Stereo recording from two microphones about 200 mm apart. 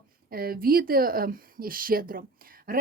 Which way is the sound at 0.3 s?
50° right (ahead or behind).